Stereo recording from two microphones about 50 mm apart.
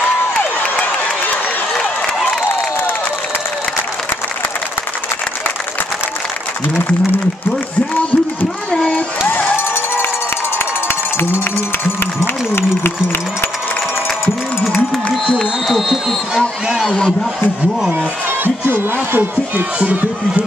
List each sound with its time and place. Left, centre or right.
0.4 s a sound: left
9.3 s crowd: left
12.2 s run: left
15.3 s speech: centre
18.4 s speech: right